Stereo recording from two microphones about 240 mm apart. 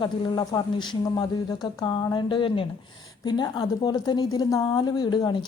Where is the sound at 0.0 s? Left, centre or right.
Centre.